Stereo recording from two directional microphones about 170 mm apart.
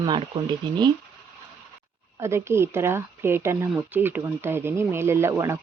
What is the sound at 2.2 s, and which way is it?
Speech, 15° right (ahead or behind).